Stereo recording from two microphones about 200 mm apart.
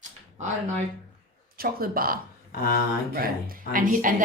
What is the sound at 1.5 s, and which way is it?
Speech, 45° right (ahead or behind).